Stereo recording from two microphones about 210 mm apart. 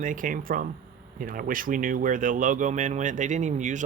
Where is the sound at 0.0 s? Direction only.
40° right (ahead or behind).